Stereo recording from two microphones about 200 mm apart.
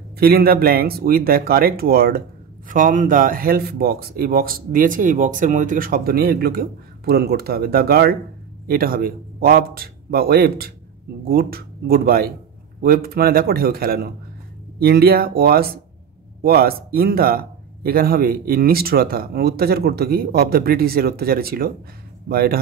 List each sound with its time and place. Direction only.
0.2 s speech: 50° right (ahead or behind)